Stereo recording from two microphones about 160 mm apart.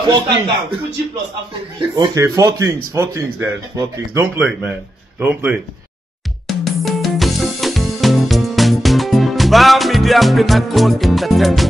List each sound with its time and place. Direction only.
0.0 s speech: 25° right (ahead or behind)
2.0 s speech: 20° right (ahead or behind)
4.4 s speech: 5° right (ahead or behind)
6.4 s music: centre (ahead or behind)